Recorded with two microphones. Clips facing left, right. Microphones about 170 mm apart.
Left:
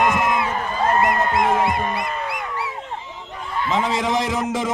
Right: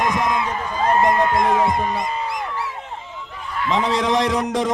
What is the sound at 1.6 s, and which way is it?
Speech, 65° left (ahead or behind).